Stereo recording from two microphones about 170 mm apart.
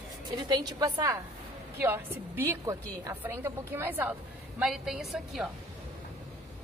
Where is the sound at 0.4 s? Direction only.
25° right (ahead or behind); by 5.5 s centre (ahead or behind).